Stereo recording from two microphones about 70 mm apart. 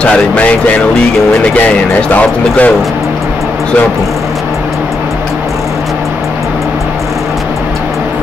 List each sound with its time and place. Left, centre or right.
0.0 s speech: centre
2.1 s speech: left